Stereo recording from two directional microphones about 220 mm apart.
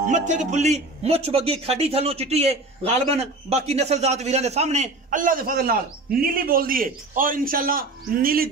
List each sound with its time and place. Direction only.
0.1 s a man's voice: 35° right (ahead or behind)